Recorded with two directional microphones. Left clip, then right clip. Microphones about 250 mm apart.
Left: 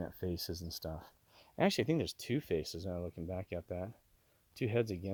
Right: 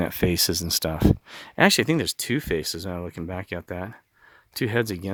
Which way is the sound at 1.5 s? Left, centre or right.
Centre.